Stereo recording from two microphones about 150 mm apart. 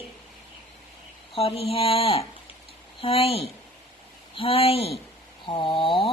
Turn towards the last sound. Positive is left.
turn(degrees=35)  # may be behind; listen again after turning